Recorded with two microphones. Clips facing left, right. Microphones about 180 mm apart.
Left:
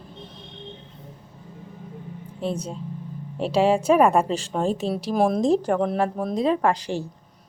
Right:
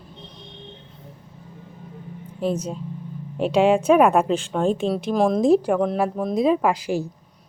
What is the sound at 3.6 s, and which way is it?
Speech, centre (ahead or behind).